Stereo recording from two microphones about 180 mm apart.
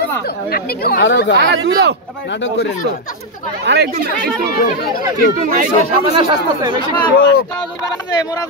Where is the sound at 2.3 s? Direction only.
80° left.